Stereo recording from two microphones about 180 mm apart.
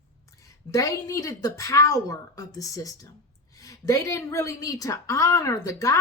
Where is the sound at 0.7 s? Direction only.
20° left (ahead or behind).